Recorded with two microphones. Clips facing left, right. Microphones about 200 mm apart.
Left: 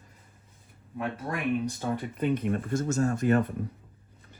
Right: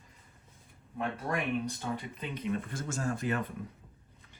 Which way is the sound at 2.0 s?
50° left (ahead or behind).